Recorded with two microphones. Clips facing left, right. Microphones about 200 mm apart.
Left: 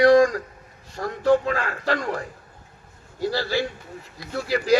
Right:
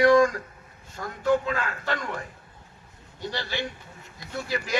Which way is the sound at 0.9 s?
40° left (ahead or behind).